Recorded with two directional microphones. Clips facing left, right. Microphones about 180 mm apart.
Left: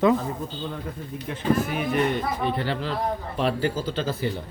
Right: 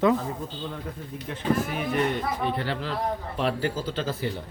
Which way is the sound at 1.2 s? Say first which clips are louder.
Left 2 dB; 15° left (ahead or behind).